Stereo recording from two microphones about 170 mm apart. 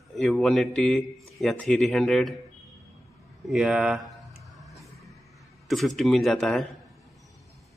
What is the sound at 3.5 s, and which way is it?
Speech, 5° right (ahead or behind).